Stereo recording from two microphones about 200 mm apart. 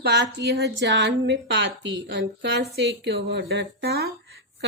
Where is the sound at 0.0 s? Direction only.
55° right (ahead or behind).